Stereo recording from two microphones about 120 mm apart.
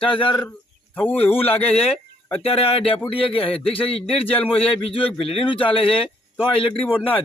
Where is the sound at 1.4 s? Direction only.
55° left (ahead or behind).